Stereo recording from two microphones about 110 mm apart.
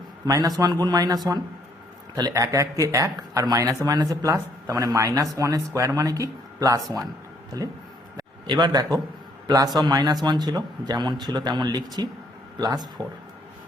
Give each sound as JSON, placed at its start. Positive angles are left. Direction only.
{"t": 0.3, "sound": "speech", "side_deg": -35}
{"t": 8.1, "sound": "a sound", "side_deg": -40}
{"t": 9.7, "sound": "speech", "side_deg": -40}